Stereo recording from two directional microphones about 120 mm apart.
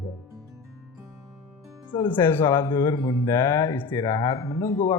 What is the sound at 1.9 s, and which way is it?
Speech, 40° left (ahead or behind).